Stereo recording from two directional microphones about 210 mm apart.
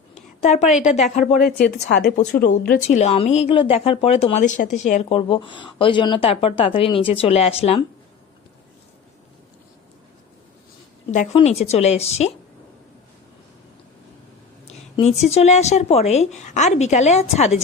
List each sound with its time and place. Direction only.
0.4 s a woman's voice: 35° left (ahead or behind)
1.4 s a woman's voice: 45° left (ahead or behind); by 7.9 s 30° left (ahead or behind)
11.1 s a woman's voice: 35° left (ahead or behind)
14.7 s a sound: 30° left (ahead or behind)
15.2 s a woman's voice: 30° left (ahead or behind)